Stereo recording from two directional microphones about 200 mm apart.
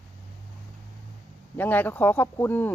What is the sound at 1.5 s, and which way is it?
Speech, 10° left (ahead or behind).